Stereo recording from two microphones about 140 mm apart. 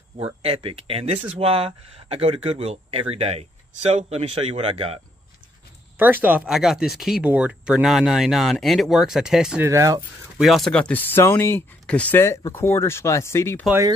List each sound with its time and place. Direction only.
0.2 s speech: 45° right (ahead or behind)
5.9 s speech: 15° right (ahead or behind)
9.6 s speech: 20° right (ahead or behind)
10.3 s speech: centre (ahead or behind); by 13.7 s 20° left (ahead or behind)